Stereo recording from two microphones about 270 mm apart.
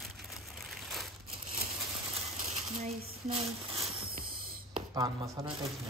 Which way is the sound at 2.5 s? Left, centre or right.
Right.